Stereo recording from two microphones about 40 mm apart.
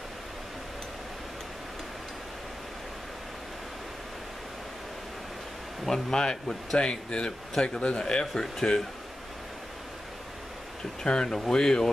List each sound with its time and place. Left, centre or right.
5.9 s speech: centre
11.1 s speech: left